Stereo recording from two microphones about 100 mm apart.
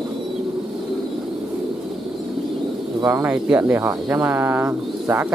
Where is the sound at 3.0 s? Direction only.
25° right (ahead or behind).